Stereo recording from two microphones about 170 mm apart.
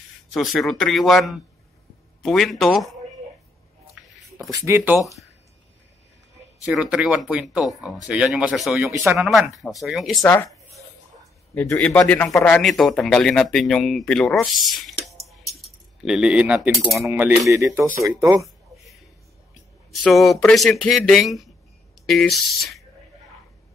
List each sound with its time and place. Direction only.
0.3 s speech: centre (ahead or behind)
4.5 s speech: 15° right (ahead or behind)
6.6 s speech: 5° right (ahead or behind)
10.2 s a man's voice: 10° left (ahead or behind)
11.5 s a man's voice: 10° left (ahead or behind); by 18.5 s 20° right (ahead or behind)
19.9 s speech: centre (ahead or behind)